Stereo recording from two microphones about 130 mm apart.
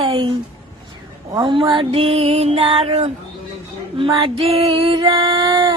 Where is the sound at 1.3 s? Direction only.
35° right (ahead or behind).